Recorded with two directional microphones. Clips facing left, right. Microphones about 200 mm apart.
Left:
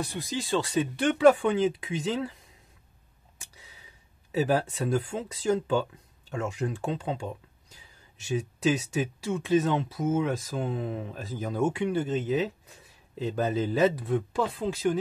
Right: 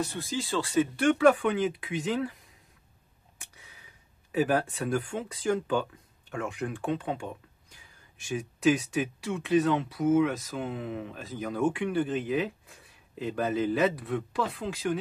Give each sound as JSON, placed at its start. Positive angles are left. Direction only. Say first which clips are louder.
{"t": 0.0, "sound": "speech", "louder": "right 1 dB", "side_deg": 15}
{"t": 4.3, "sound": "speech", "louder": "even", "side_deg": 25}
{"t": 8.3, "sound": "speech", "louder": "right 1 dB", "side_deg": 25}